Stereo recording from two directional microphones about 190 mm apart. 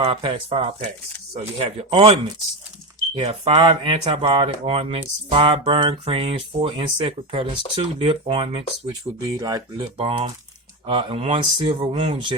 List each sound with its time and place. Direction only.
0.0 s speech: 25° right (ahead or behind)
10.0 s speech: 30° right (ahead or behind)